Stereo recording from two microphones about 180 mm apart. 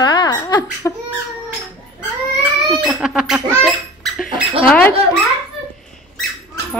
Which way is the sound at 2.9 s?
Centre (ahead or behind).